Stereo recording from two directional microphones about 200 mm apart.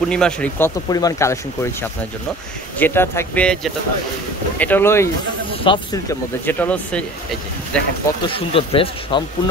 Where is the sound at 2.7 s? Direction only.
10° left (ahead or behind).